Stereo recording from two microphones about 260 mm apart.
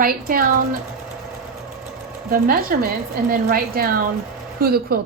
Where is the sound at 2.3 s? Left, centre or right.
Right.